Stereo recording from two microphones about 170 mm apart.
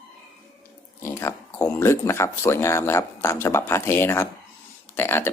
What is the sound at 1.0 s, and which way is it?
Speech, 15° left (ahead or behind).